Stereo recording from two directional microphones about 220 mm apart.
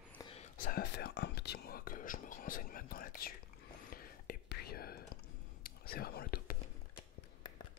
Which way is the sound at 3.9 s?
40° left (ahead or behind).